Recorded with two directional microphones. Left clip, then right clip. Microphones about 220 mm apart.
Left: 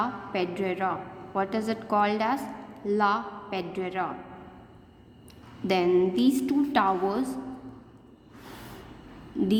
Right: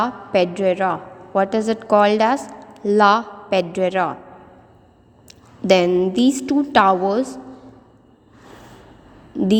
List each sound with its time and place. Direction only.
0.0 s a woman's voice: 30° right (ahead or behind)
5.6 s a sound: 30° right (ahead or behind)
5.9 s a woman's voice: 25° right (ahead or behind)
9.3 s a woman's voice: 20° right (ahead or behind)